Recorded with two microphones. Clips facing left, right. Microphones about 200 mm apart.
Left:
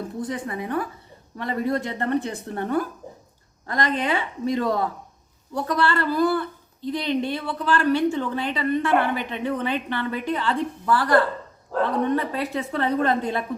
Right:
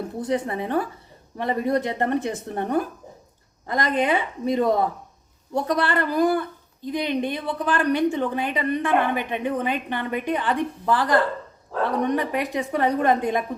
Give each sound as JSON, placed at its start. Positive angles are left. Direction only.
{"t": 0.2, "sound": "a woman's voice", "side_deg": -25}